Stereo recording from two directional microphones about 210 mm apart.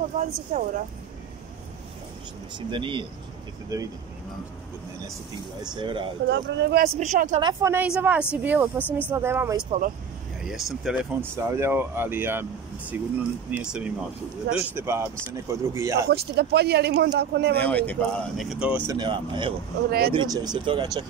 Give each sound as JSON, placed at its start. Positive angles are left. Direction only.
{"t": 0.2, "sound": "speech", "side_deg": -35}
{"t": 2.7, "sound": "speech", "side_deg": -25}
{"t": 5.8, "sound": "speech", "side_deg": -25}
{"t": 6.2, "sound": "speech", "side_deg": -55}
{"t": 7.0, "sound": "speech", "side_deg": -35}
{"t": 7.3, "sound": "speech", "side_deg": -15}
{"t": 10.4, "sound": "speech", "side_deg": 0}
{"t": 16.1, "sound": "speech", "side_deg": -50}
{"t": 17.6, "sound": "speech", "side_deg": 10}
{"t": 18.9, "sound": "speech", "side_deg": -20}